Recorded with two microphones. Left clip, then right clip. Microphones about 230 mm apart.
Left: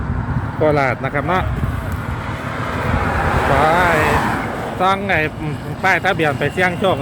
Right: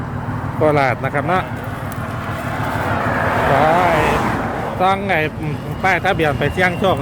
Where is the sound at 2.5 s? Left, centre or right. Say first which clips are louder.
Right 1 dB; left.